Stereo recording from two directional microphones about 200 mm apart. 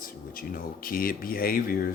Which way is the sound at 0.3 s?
45° left (ahead or behind).